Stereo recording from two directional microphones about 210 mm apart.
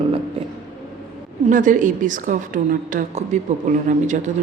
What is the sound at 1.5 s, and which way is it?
A woman's voice, 40° right (ahead or behind).